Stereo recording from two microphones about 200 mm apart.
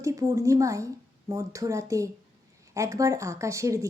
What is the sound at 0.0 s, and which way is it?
A woman's voice, 15° right (ahead or behind).